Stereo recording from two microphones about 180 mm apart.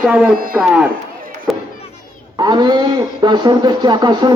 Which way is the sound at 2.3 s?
25° right (ahead or behind).